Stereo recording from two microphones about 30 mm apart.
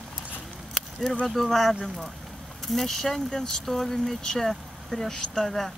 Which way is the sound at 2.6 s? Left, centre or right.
Centre.